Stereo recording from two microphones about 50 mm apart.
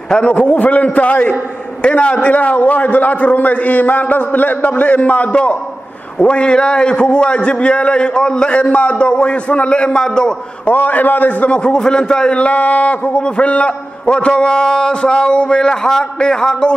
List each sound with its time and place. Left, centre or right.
0.1 s a man's voice: left
10.7 s a man's voice: left
11.6 s a man's voice: centre